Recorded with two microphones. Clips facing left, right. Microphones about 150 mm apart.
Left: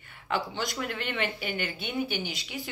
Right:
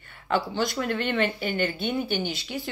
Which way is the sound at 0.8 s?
10° left (ahead or behind).